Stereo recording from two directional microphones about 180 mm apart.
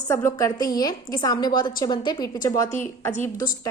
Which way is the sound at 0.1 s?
15° left (ahead or behind).